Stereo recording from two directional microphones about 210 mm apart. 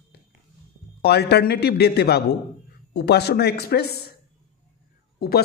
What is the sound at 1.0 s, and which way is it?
Speech, 50° left (ahead or behind).